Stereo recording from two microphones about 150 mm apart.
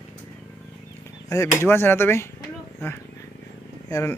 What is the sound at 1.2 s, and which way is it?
Speech, 20° left (ahead or behind).